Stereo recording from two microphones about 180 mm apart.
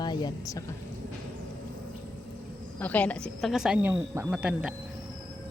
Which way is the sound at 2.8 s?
10° left (ahead or behind).